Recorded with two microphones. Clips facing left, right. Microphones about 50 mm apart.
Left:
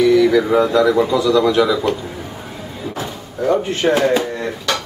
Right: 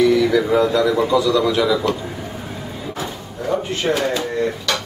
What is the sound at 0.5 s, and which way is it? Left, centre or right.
Speech, centre.